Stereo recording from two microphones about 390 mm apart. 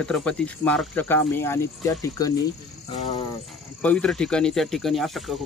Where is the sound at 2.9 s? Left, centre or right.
Centre.